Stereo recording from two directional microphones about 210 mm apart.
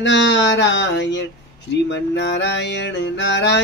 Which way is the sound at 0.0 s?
60° left (ahead or behind).